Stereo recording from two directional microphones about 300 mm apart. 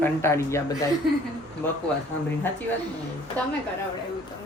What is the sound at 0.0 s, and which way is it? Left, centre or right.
Speech, centre.